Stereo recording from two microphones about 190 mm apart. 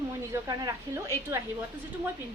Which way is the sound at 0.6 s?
15° right (ahead or behind).